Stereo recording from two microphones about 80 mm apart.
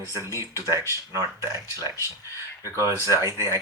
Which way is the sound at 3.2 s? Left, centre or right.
Right.